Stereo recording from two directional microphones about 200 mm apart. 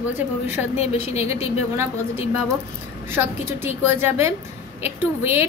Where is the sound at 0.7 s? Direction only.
35° left (ahead or behind).